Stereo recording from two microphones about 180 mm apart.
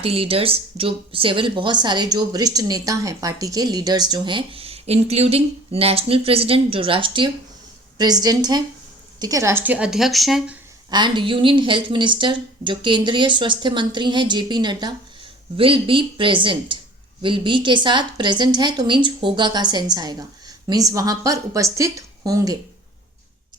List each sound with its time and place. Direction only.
0.0 s speech: 30° right (ahead or behind); by 10.6 s centre (ahead or behind)
10.9 s speech: 25° right (ahead or behind)